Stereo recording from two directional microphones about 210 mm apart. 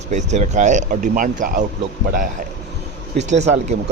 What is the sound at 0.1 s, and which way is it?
Speech, 35° right (ahead or behind).